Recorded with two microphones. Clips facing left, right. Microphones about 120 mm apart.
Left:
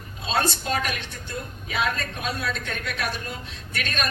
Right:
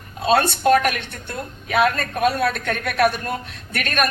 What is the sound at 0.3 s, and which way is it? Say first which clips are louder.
A woman's voice: right 9 dB; 60° right (ahead or behind).